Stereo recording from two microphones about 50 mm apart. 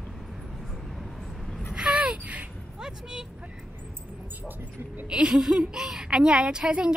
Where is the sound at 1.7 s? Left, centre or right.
Centre.